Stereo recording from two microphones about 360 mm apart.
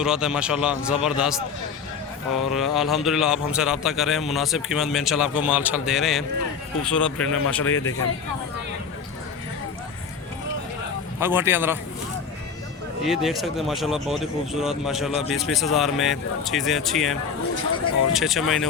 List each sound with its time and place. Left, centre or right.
0.0 s a man's voice: centre
2.5 s a man's voice: centre
7.2 s a man's voice: left
11.2 s a man's voice: centre
13.1 s a man's voice: centre